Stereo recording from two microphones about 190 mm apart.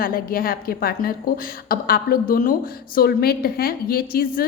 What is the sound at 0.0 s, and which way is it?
A woman's voice, 50° left (ahead or behind).